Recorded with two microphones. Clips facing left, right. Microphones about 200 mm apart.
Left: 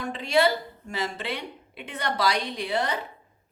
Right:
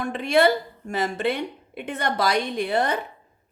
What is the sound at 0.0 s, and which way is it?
A woman's voice, 55° right (ahead or behind).